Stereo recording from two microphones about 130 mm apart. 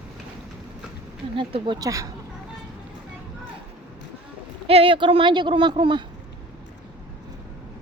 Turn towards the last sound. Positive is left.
turn(degrees=-40)  # may be behind; listen again after turning